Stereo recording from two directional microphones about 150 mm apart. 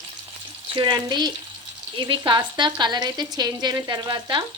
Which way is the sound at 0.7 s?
30° right (ahead or behind).